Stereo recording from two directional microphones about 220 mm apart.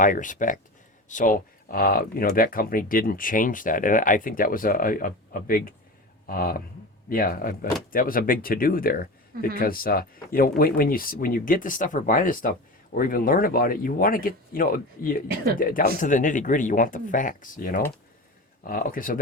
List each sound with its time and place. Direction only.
0.0 s speech: 35° left (ahead or behind)